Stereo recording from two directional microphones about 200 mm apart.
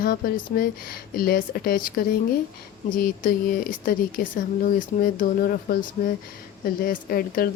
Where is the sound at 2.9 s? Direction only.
45° left (ahead or behind).